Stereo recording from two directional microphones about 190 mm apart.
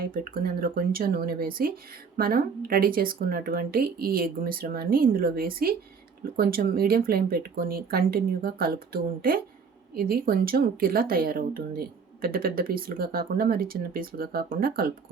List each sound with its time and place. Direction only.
0.0 s speech: 50° right (ahead or behind)